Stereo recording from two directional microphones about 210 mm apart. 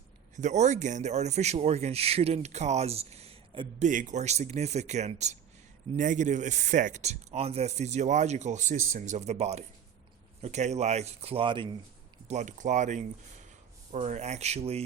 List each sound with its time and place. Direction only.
0.3 s speech: 35° right (ahead or behind)
3.8 s speech: 35° right (ahead or behind)
12.3 s speech: 35° right (ahead or behind)